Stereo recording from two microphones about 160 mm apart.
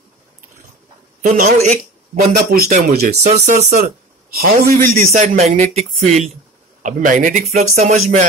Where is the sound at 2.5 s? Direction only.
65° right (ahead or behind).